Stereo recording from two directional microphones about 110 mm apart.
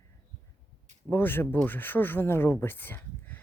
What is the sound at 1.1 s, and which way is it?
Speech, 20° left (ahead or behind).